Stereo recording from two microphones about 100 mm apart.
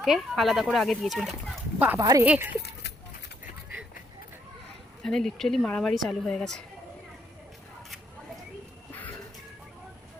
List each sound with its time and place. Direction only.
0.0 s speech: centre (ahead or behind)
2.0 s speech: 40° right (ahead or behind)
2.2 s speech: 15° right (ahead or behind)
5.0 s speech: 5° left (ahead or behind)
8.9 s music: 20° left (ahead or behind)